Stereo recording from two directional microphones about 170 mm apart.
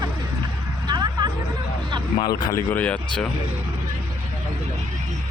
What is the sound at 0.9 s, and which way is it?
Hubbub, 25° right (ahead or behind).